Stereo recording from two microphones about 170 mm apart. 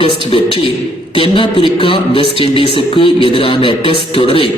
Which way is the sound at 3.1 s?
30° right (ahead or behind).